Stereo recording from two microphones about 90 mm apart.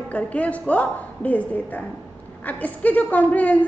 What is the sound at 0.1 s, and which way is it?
A woman's voice, 15° left (ahead or behind).